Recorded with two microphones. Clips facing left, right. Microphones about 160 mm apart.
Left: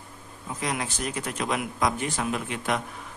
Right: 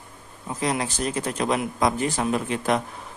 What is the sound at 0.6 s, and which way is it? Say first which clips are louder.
A man's voice: right 5 dB; 35° right (ahead or behind).